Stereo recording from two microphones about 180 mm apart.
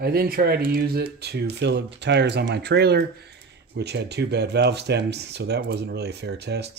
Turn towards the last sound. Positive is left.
turn(degrees=-65)  # may be behind; listen again after turning